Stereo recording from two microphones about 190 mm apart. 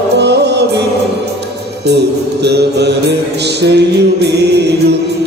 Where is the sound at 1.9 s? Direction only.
60° right (ahead or behind).